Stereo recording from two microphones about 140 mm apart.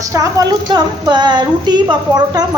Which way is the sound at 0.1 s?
25° right (ahead or behind).